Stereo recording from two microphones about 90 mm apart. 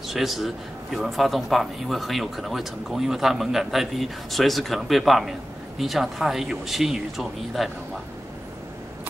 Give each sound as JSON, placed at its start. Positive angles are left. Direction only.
{"t": 0.1, "sound": "speech", "side_deg": 0}